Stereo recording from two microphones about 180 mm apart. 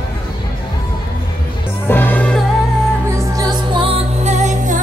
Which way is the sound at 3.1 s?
20° right (ahead or behind).